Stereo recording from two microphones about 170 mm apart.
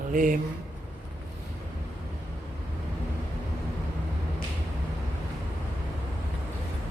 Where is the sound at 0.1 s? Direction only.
50° right (ahead or behind).